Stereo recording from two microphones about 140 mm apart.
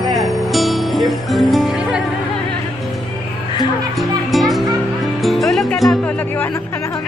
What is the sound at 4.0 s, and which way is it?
Music, centre (ahead or behind).